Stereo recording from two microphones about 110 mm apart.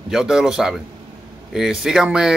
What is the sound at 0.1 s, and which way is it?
A man's voice, 5° right (ahead or behind).